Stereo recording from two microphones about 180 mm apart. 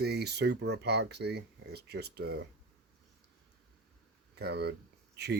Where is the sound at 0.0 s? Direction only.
65° right (ahead or behind).